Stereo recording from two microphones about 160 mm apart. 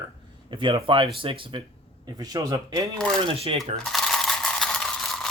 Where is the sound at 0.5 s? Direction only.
30° right (ahead or behind).